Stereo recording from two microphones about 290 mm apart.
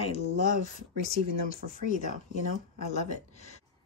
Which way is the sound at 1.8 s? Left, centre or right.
Left.